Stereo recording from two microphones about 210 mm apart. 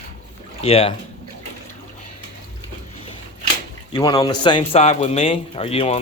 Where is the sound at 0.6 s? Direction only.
25° left (ahead or behind).